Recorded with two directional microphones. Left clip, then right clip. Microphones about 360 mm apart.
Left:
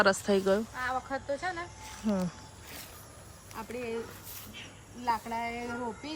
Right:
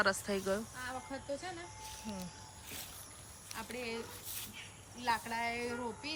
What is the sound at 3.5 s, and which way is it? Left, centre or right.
Speech, centre.